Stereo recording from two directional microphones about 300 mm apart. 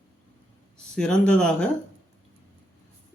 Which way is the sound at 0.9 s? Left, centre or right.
Centre.